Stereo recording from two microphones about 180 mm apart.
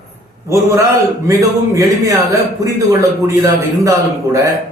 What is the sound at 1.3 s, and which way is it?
Speech, 15° right (ahead or behind).